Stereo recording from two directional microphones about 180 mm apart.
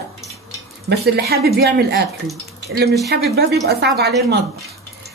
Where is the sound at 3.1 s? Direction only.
65° right (ahead or behind).